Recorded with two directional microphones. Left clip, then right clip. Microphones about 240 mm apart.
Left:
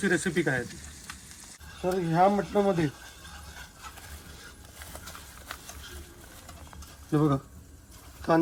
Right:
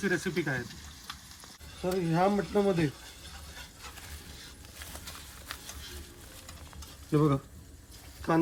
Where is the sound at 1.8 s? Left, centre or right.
Centre.